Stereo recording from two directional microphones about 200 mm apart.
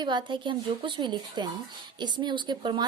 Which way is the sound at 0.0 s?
25° right (ahead or behind).